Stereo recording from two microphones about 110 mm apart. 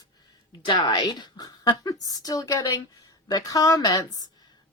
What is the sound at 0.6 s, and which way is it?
Speech, 45° left (ahead or behind).